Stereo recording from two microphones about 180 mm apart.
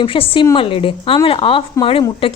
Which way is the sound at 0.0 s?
30° left (ahead or behind).